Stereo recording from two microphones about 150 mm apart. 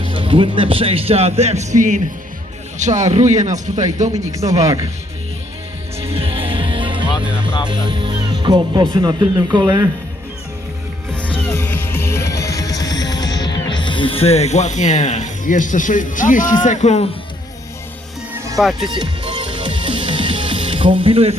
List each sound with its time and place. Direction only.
0.0 s speech: 35° right (ahead or behind); by 3.8 s 55° right (ahead or behind)
4.1 s speech: 20° right (ahead or behind)
6.1 s music: 40° right (ahead or behind)
7.7 s speech: 30° right (ahead or behind)
11.4 s music: 15° left (ahead or behind); by 17.1 s 50° left (ahead or behind)
18.3 s music: 20° right (ahead or behind)
18.6 s speech: centre (ahead or behind)
18.9 s music: 30° right (ahead or behind)